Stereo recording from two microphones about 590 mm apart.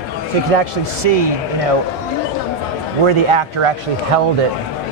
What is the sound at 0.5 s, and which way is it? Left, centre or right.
Speech, right.